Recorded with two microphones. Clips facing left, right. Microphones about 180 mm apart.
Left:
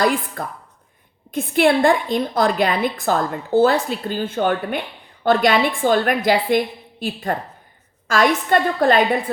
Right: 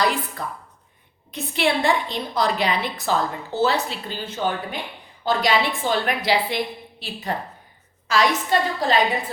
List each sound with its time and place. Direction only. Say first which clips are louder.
0.0 s a woman's voice: left 4 dB; 50° left (ahead or behind)